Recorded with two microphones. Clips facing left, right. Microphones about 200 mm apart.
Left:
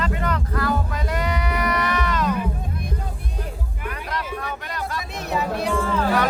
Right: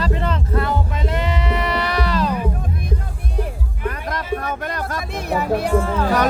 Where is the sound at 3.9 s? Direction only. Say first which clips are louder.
Right 6 dB; 50° right (ahead or behind).